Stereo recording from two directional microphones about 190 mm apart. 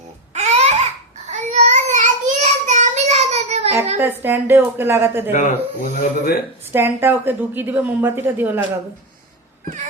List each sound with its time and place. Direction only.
0.3 s babbling: 35° right (ahead or behind)
1.3 s child singing: 40° right (ahead or behind)
3.9 s a woman's voice: 10° right (ahead or behind)
5.3 s speech: 45° left (ahead or behind)
6.7 s a woman's voice: 10° right (ahead or behind)